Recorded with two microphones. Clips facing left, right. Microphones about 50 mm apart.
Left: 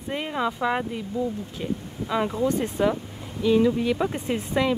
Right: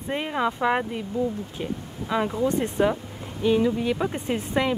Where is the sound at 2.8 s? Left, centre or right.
Centre.